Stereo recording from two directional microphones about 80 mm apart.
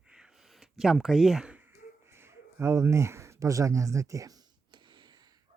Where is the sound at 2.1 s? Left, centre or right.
Right.